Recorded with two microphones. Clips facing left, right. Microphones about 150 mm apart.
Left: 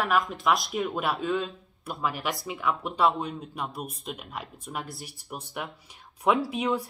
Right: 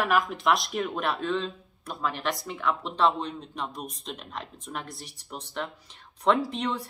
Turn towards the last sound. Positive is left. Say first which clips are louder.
# left 2 dB
turn(degrees=10)  # may be behind; listen again after turning